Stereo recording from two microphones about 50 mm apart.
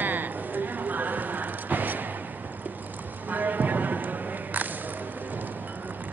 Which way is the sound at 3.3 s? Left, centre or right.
Right.